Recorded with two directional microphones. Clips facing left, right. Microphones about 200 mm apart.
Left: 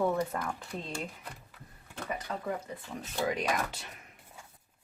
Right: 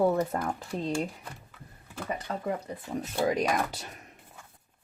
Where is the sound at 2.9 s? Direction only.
40° right (ahead or behind).